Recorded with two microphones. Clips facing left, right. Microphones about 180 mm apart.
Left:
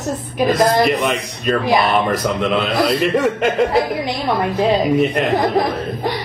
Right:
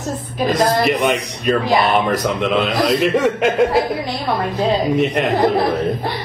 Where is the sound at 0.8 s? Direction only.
Centre (ahead or behind).